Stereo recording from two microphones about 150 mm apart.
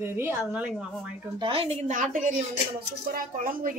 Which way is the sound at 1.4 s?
40° right (ahead or behind).